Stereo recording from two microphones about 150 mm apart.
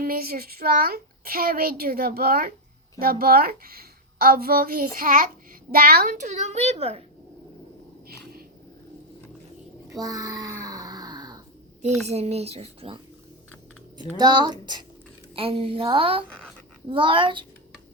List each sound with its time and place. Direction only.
0.0 s a child's voice: 85° right
3.0 s a child's voice: 80° right; by 5.3 s 65° right (ahead or behind)
5.7 s a child's voice: 80° right
6.1 s speech: 50° right (ahead or behind)
8.0 s whip: 90° right
9.9 s a sound: 25° right (ahead or behind)
12.0 s speech: 45° right (ahead or behind)
14.2 s a woman's voice: 30° right (ahead or behind)